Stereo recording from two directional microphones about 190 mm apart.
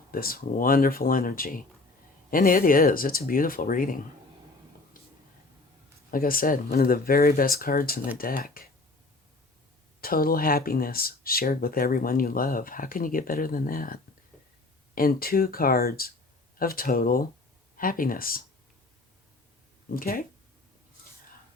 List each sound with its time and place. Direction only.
0.1 s speech: 50° left (ahead or behind)
4.9 s a sound: 45° left (ahead or behind)
6.1 s speech: 50° left (ahead or behind)
10.0 s speech: 50° left (ahead or behind)
19.9 s speech: 50° left (ahead or behind)